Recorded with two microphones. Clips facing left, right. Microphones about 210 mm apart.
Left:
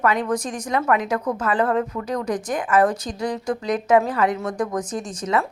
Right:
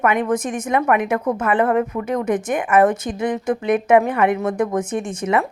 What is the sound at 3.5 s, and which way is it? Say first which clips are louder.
Speech: right 3 dB; 25° right (ahead or behind).